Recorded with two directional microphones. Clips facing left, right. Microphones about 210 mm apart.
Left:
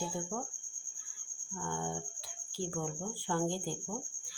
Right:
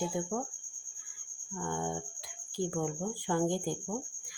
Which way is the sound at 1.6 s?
15° right (ahead or behind).